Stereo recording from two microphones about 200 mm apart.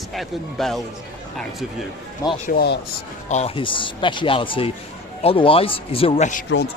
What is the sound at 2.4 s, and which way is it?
Speech, 50° left (ahead or behind).